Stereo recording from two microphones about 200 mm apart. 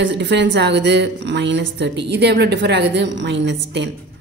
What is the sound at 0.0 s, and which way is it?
A woman's voice, 60° right (ahead or behind).